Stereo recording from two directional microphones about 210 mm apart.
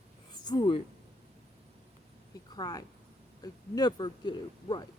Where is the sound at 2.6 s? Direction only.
20° left (ahead or behind).